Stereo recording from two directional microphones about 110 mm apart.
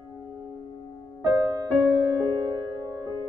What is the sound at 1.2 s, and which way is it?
Music, 35° right (ahead or behind).